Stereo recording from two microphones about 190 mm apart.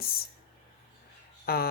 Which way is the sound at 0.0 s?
50° left (ahead or behind).